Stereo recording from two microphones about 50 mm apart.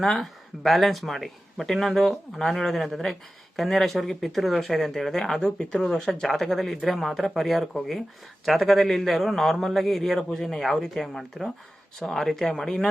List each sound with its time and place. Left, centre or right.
0.0 s a man's voice: centre
5.8 s a man's voice: centre